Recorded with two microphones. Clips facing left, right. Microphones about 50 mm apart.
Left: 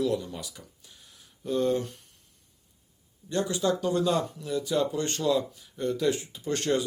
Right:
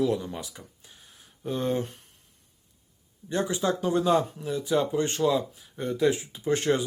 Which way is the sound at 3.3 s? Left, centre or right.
Centre.